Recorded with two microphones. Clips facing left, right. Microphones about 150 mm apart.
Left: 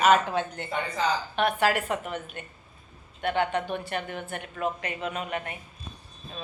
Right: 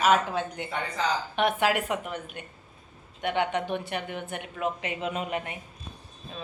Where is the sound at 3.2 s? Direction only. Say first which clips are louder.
Left 1 dB; 15° right (ahead or behind).